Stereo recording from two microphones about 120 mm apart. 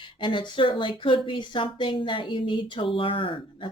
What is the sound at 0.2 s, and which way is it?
A woman's voice, 40° left (ahead or behind).